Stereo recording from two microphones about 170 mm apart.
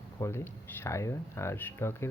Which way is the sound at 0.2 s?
15° left (ahead or behind).